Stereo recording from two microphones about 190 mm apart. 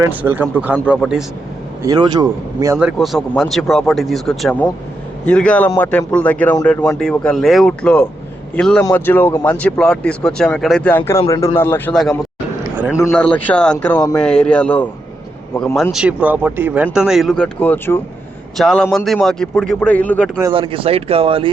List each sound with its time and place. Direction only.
0.0 s speech: 10° right (ahead or behind)
1.8 s speech: 20° right (ahead or behind)
2.7 s speech: centre (ahead or behind)
12.6 s a sound: 10° right (ahead or behind)
13.0 s speech: 10° left (ahead or behind)
20.4 s speech: 25° right (ahead or behind)